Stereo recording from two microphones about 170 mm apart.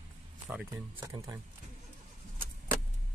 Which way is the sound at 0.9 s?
25° right (ahead or behind).